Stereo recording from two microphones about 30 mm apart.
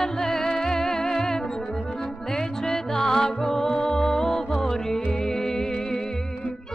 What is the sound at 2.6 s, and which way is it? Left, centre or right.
Music, centre.